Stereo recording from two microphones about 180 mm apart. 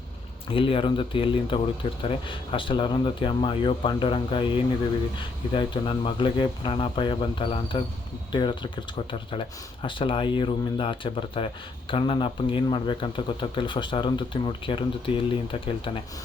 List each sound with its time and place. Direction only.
0.5 s speech: 30° left (ahead or behind)